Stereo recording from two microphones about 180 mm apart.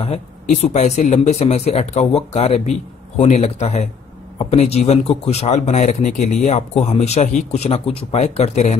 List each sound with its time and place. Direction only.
0.0 s speech: 30° left (ahead or behind)